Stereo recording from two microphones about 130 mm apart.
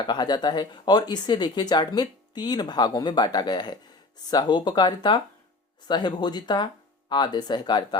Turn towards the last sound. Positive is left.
turn(degrees=35)  # may be behind; listen again after turning